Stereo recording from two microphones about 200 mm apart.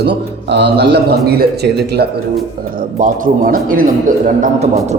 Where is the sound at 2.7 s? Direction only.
45° right (ahead or behind).